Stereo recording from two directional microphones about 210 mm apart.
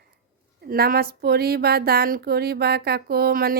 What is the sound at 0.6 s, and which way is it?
Speech, 45° right (ahead or behind).